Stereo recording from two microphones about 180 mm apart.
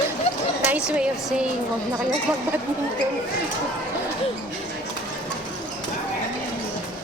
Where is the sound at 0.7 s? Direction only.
5° right (ahead or behind).